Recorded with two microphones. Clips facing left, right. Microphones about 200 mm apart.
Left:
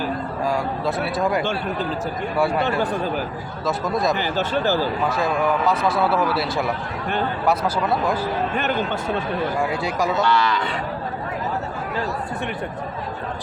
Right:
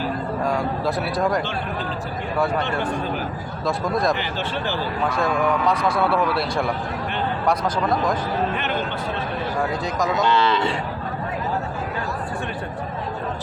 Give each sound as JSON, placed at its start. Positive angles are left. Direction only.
{"t": 0.4, "sound": "speech", "side_deg": 0}
{"t": 3.7, "sound": "speech", "side_deg": 0}
{"t": 4.2, "sound": "speech", "side_deg": 40}
{"t": 5.1, "sound": "speech", "side_deg": 5}
{"t": 10.2, "sound": "speech", "side_deg": -20}